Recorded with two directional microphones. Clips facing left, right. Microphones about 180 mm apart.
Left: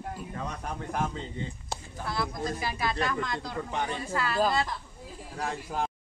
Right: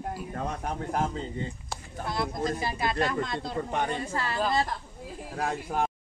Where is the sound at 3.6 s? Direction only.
50° right (ahead or behind).